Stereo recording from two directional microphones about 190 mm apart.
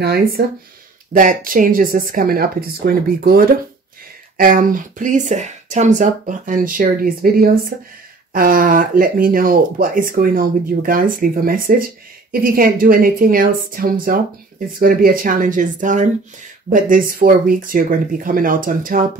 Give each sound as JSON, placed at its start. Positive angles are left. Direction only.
{"t": 0.4, "sound": "speech", "side_deg": -55}
{"t": 1.1, "sound": "speech", "side_deg": -45}